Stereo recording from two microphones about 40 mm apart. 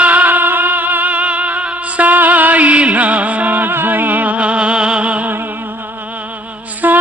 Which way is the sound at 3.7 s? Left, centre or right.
Right.